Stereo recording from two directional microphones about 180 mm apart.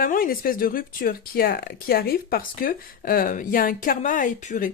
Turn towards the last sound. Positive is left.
turn(degrees=45)  # may be behind; listen again after turning